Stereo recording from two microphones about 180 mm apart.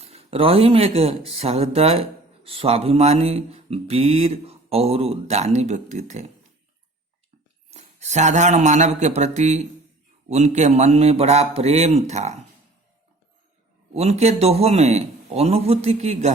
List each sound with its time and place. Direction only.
0.0 s speech: 35° right (ahead or behind)
7.7 s speech: 40° right (ahead or behind)
13.9 s speech: 35° right (ahead or behind)